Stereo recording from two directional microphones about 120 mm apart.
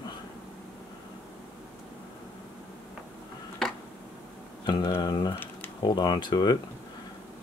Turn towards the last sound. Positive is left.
turn(degrees=40)  # may be behind; listen again after turning